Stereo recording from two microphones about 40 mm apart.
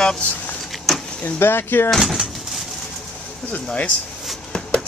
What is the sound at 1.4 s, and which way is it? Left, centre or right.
Speech, left.